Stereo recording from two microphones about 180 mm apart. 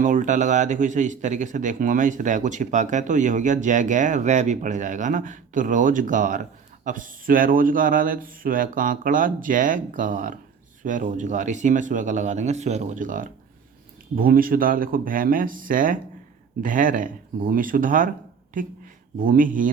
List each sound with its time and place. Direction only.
0.0 s speech: 45° right (ahead or behind)